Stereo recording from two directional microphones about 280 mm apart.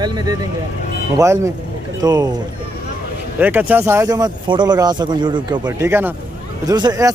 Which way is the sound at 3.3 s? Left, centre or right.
Centre.